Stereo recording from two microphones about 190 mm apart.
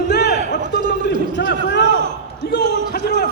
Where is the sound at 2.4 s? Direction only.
55° left (ahead or behind).